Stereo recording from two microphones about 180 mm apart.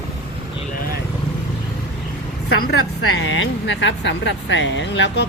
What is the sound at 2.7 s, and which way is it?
Speech, 90° left.